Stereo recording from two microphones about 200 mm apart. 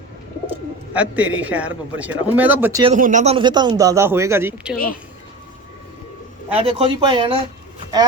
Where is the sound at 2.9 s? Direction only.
40° right (ahead or behind); by 4.7 s 10° right (ahead or behind).